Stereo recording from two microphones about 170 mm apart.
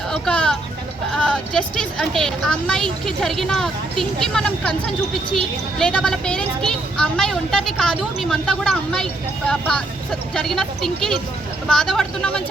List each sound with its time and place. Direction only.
0.1 s music: 5° left (ahead or behind)
1.1 s a woman's voice: 5° left (ahead or behind)